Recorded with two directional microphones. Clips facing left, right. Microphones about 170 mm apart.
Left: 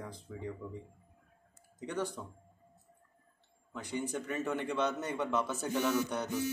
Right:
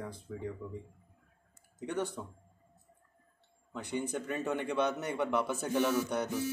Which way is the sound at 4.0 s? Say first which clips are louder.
Right 1 dB; 15° right (ahead or behind).